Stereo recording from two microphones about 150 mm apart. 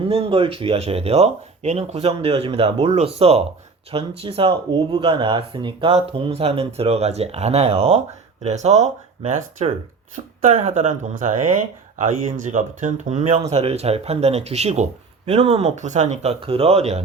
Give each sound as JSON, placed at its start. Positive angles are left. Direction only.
{"t": 0.0, "sound": "speech", "side_deg": -40}